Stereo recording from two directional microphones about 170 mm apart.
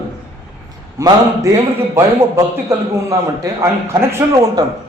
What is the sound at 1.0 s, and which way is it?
A man's voice, 20° right (ahead or behind).